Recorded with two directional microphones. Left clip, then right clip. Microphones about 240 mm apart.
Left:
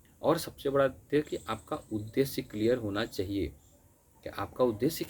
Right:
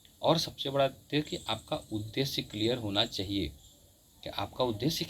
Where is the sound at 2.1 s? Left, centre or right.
Left.